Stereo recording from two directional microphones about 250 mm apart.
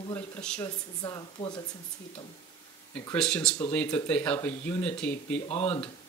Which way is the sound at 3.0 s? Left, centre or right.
Centre.